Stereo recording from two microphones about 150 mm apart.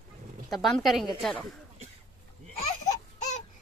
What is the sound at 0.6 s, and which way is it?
Speech, centre (ahead or behind).